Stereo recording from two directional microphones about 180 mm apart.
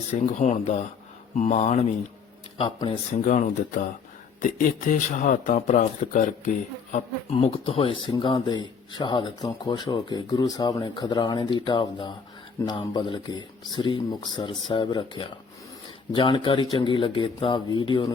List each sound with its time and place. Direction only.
0.3 s speech: 40° left (ahead or behind)
2.6 s speech: 30° left (ahead or behind)
3.2 s speech: 45° left (ahead or behind)
7.3 s speech: 30° left (ahead or behind)